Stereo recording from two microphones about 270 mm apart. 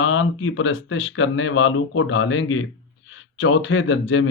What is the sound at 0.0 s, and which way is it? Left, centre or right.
Speech, left.